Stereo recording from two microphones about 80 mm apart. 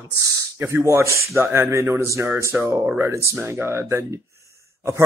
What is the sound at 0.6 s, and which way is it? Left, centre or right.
Speech, right.